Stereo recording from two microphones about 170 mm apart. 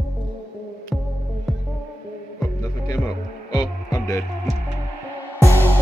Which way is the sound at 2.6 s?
25° left (ahead or behind).